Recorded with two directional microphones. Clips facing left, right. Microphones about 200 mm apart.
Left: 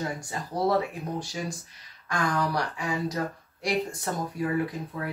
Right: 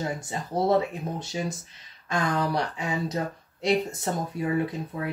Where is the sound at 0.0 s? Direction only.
25° right (ahead or behind).